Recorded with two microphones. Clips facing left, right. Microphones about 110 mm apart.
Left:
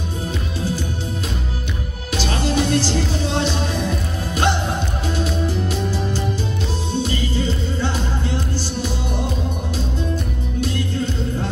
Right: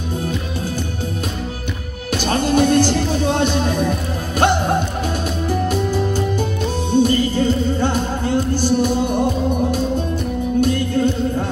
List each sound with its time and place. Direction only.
2.1 s music: 50° right (ahead or behind)